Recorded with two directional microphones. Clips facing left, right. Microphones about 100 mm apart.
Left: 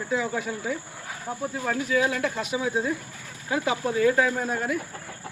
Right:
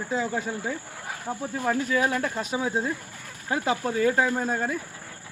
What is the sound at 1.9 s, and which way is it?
Speech, 45° right (ahead or behind).